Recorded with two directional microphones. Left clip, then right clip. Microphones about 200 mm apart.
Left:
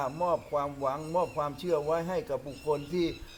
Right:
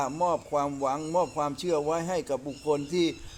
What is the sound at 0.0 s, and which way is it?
Wind chime, 50° right (ahead or behind).